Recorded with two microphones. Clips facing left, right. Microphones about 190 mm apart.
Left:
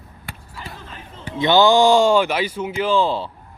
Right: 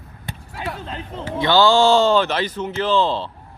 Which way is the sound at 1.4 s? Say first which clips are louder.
Left 1 dB; 20° left (ahead or behind).